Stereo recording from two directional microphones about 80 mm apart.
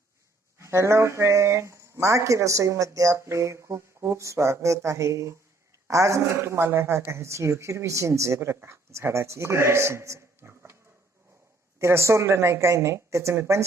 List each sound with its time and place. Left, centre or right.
0.6 s speech: right
11.8 s speech: right